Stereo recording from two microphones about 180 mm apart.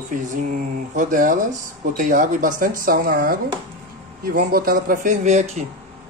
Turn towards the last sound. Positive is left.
turn(degrees=-40)  # may be behind; listen again after turning